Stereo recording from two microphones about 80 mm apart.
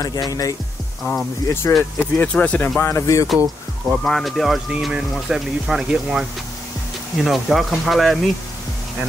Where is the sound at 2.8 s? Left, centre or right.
Left.